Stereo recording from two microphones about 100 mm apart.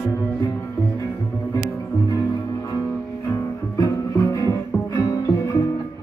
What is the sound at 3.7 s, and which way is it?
Music, 40° left (ahead or behind).